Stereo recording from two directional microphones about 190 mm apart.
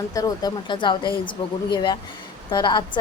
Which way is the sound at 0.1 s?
20° left (ahead or behind).